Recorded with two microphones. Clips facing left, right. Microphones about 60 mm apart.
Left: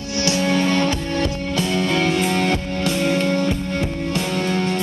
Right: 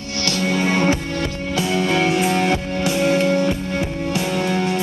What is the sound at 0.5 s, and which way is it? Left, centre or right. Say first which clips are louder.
Music: right 3 dB; left.